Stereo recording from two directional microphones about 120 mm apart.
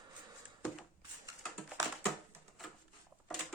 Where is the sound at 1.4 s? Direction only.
Centre (ahead or behind).